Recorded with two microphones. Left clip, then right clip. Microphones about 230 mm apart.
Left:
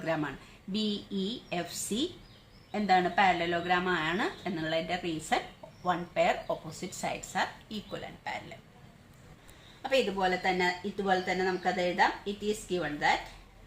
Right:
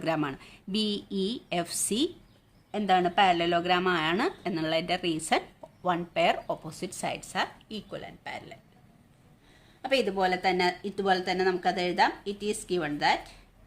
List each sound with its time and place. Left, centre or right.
0.0 s speech: right
9.8 s speech: right